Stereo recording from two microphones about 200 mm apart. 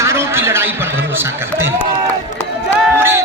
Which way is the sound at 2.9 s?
10° right (ahead or behind).